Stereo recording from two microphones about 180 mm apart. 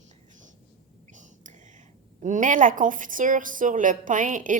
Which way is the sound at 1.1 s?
45° right (ahead or behind).